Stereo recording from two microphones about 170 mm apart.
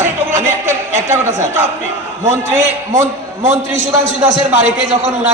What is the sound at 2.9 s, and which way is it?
Speech, 15° right (ahead or behind).